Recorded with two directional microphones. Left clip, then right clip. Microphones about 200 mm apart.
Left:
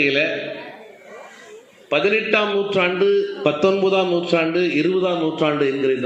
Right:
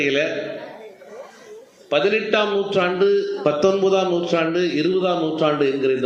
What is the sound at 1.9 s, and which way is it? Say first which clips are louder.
A man's voice: left 1 dB; 50° left (ahead or behind).